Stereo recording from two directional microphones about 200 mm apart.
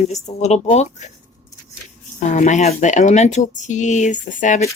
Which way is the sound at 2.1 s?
35° left (ahead or behind).